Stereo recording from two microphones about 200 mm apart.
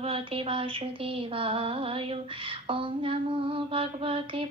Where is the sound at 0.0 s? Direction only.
30° right (ahead or behind).